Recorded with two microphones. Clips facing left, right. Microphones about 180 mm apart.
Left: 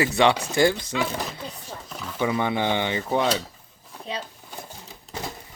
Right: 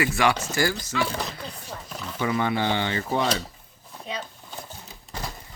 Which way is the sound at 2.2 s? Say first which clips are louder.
Left 1 dB; 20° left (ahead or behind).